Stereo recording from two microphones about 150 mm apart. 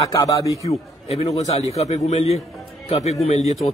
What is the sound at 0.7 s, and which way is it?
A man's voice, 45° left (ahead or behind).